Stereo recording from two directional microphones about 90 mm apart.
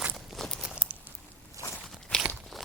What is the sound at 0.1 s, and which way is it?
Walk, 5° left (ahead or behind).